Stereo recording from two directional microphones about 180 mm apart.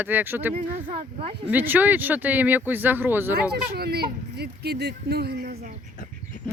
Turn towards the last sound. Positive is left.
turn(degrees=-55)  # may be behind; listen again after turning